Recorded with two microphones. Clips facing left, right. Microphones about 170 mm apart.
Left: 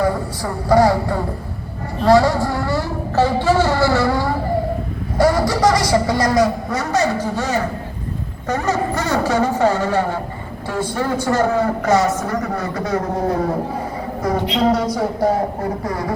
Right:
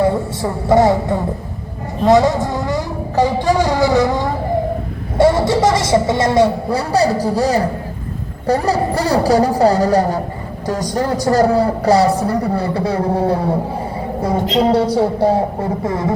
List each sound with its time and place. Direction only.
0.0 s a woman's voice: 25° right (ahead or behind)
14.5 s a man's voice: 30° right (ahead or behind)